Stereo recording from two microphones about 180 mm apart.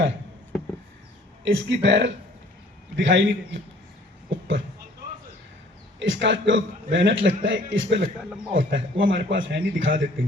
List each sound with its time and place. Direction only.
1.5 s a man's voice: 85° right
4.3 s a sound: 90° right
6.0 s a man's voice: 90° right